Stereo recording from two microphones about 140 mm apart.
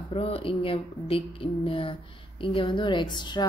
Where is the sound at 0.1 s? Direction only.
40° left (ahead or behind).